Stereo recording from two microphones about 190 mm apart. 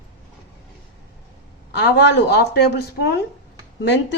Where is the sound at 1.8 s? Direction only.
65° left (ahead or behind).